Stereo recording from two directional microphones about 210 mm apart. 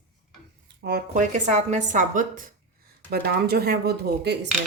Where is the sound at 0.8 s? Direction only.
50° right (ahead or behind).